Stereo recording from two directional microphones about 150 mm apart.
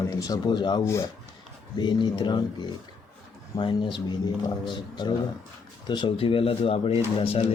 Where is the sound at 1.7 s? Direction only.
30° left (ahead or behind).